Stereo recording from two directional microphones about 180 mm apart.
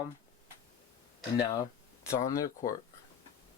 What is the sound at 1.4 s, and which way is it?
Speech, 15° left (ahead or behind).